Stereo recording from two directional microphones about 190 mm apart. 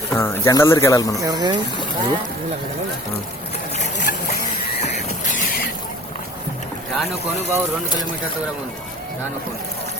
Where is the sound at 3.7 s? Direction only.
45° left (ahead or behind).